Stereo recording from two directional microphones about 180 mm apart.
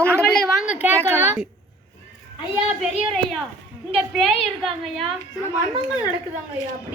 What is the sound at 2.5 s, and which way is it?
A woman's voice, 5° right (ahead or behind).